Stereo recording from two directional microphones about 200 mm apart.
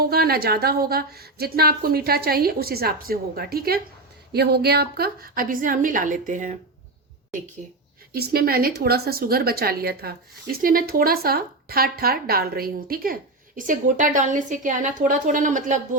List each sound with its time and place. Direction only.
0.0 s speech: 50° right (ahead or behind)
8.1 s a woman's voice: 50° right (ahead or behind)